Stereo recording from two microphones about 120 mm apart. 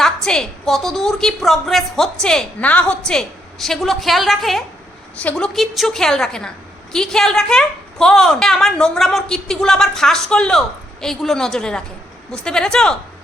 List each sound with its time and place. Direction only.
0.0 s a woman's voice: 5° left (ahead or behind)